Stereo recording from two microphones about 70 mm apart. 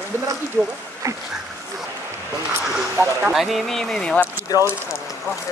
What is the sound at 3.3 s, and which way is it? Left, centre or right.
Speech, centre.